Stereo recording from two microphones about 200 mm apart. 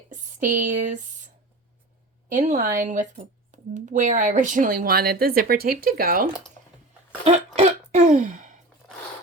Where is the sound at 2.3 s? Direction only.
35° right (ahead or behind).